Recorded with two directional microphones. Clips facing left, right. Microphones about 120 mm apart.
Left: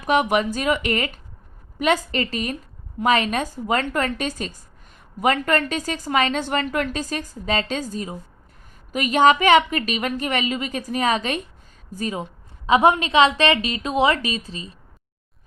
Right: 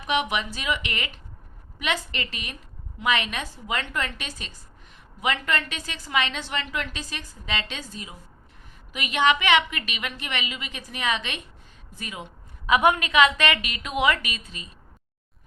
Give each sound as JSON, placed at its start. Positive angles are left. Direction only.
{"t": 0.0, "sound": "a woman's voice", "side_deg": 45}